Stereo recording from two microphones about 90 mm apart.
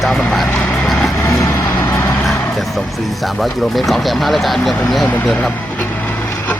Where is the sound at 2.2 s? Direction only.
Centre (ahead or behind).